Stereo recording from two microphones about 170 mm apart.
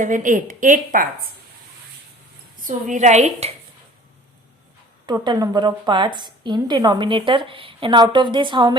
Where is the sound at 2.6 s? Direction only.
45° right (ahead or behind).